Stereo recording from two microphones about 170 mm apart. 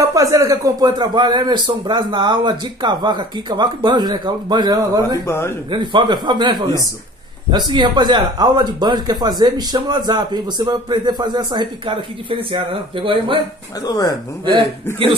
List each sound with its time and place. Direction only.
0.0 s speech: 20° right (ahead or behind)
5.2 s speech: 15° left (ahead or behind)
5.7 s speech: 30° right (ahead or behind)
13.8 s speech: 20° left (ahead or behind)